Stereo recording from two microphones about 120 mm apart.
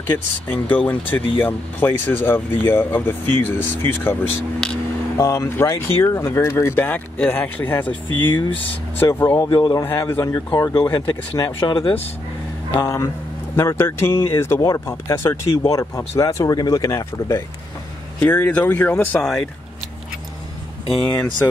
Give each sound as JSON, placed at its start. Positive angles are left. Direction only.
{"t": 0.0, "sound": "speech", "side_deg": 15}
{"t": 4.6, "sound": "a sound", "side_deg": 5}
{"t": 5.1, "sound": "speech", "side_deg": 30}
{"t": 8.1, "sound": "speech", "side_deg": 40}
{"t": 9.0, "sound": "speech", "side_deg": 20}
{"t": 9.4, "sound": "speech", "side_deg": 35}
{"t": 9.8, "sound": "speech", "side_deg": 20}
{"t": 12.7, "sound": "speech", "side_deg": 25}
{"t": 18.2, "sound": "speech", "side_deg": 10}